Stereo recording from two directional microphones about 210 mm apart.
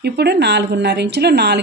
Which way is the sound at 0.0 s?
50° right (ahead or behind).